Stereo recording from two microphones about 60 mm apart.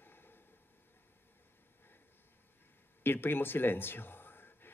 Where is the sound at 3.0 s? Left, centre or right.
Left.